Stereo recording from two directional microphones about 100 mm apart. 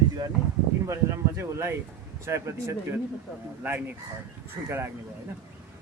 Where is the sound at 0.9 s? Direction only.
25° right (ahead or behind).